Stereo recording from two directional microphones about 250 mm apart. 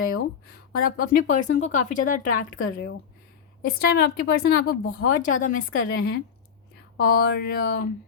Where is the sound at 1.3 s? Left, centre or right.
Left.